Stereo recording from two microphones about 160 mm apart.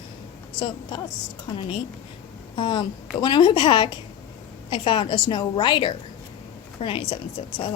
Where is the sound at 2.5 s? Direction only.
30° left (ahead or behind).